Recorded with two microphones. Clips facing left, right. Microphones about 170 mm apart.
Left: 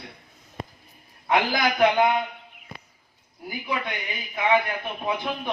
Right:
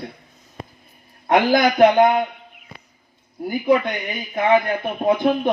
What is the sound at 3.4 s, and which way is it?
A man's voice, 50° right (ahead or behind).